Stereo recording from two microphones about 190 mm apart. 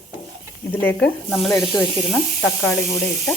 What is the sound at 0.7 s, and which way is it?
Speech, 10° left (ahead or behind).